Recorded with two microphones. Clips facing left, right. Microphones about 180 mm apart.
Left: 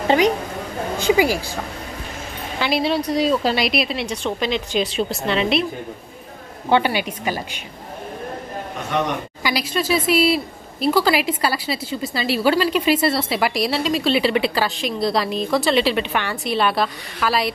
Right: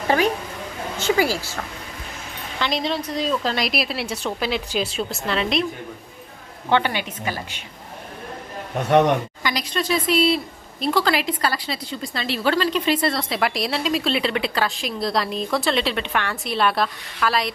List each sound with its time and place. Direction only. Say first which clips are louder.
0.9 s a woman's voice: left 3 dB; 15° left (ahead or behind)
2.6 s a woman's voice: left 4 dB; 10° left (ahead or behind)
6.7 s a woman's voice: left 3 dB; 10° left (ahead or behind)
9.4 s a woman's voice: left 3 dB; 5° left (ahead or behind)